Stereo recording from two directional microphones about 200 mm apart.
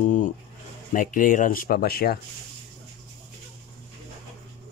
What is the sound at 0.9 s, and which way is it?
Speech, 40° left (ahead or behind).